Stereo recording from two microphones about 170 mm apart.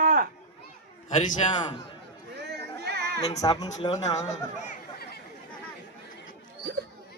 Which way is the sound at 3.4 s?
20° left (ahead or behind).